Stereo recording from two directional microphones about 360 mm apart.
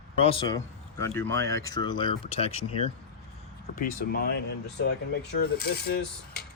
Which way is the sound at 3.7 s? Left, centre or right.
Left.